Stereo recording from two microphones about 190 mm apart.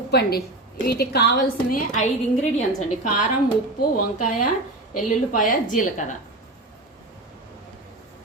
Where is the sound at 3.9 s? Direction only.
45° left (ahead or behind).